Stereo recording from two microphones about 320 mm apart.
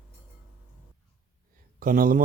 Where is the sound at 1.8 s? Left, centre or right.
Right.